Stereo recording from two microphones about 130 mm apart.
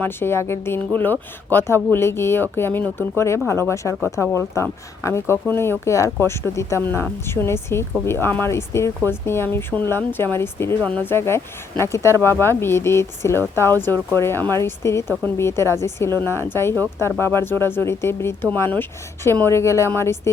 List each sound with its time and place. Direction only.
0.0 s speech: 20° left (ahead or behind)